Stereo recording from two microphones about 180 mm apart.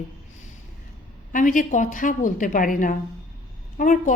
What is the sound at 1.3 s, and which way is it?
A woman's voice, 45° left (ahead or behind).